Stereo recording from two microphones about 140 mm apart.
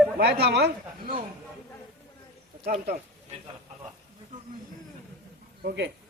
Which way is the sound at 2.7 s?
90° right.